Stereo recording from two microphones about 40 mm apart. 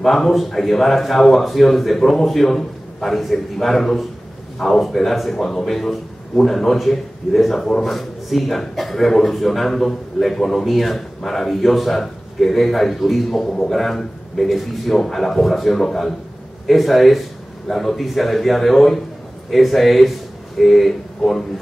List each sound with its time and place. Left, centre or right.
0.0 s a man's voice: centre